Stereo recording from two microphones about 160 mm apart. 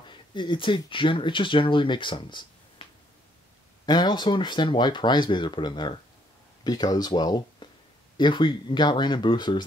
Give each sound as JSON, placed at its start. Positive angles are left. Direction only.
{"t": 0.0, "sound": "speech", "side_deg": 30}
{"t": 2.8, "sound": "a sound", "side_deg": 30}
{"t": 3.8, "sound": "speech", "side_deg": 25}